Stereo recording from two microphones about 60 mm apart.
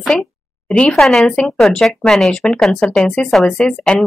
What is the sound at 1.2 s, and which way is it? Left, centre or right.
Speech, centre.